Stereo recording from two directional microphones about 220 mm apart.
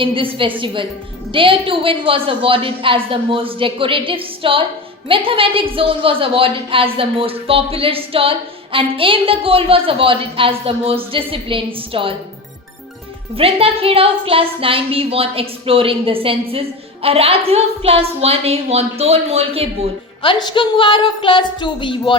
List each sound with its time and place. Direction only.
0.0 s a woman's voice: 25° right (ahead or behind)
13.3 s a woman's voice: 25° right (ahead or behind)
20.2 s a woman's voice: 20° left (ahead or behind)